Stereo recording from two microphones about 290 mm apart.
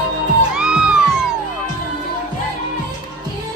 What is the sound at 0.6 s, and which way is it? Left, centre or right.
Music, centre.